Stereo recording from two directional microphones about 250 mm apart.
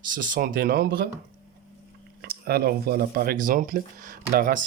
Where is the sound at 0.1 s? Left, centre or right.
Right.